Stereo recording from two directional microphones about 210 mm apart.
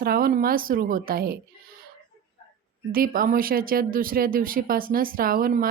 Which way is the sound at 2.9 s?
40° right (ahead or behind).